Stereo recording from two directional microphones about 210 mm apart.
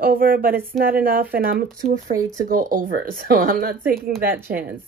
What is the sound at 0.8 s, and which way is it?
Speech, 45° right (ahead or behind).